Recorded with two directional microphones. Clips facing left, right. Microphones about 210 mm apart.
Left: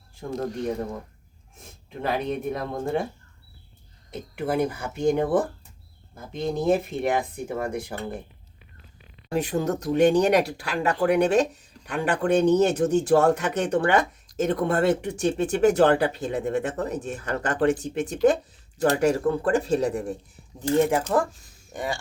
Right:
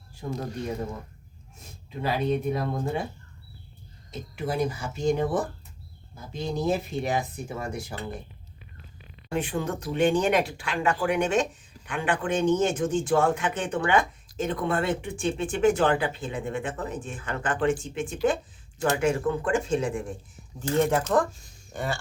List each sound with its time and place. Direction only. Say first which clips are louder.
0.2 s speech: left 1 dB; 45° left (ahead or behind)
2.0 s speech: right 1 dB; 55° left (ahead or behind)
4.1 s speech: left 4 dB; 60° left (ahead or behind)
9.3 s speech: left 4 dB; 40° left (ahead or behind)
20.6 s speech: left 2 dB; 15° left (ahead or behind)